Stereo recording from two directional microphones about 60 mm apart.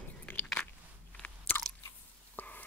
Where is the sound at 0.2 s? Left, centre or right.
Left.